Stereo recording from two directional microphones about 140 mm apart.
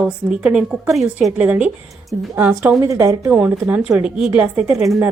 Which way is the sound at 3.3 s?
5° right (ahead or behind).